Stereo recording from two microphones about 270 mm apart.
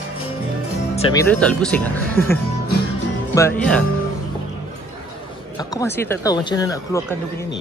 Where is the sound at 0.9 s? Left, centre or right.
Left.